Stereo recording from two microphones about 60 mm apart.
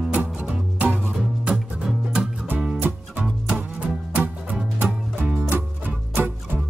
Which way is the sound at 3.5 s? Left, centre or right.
Right.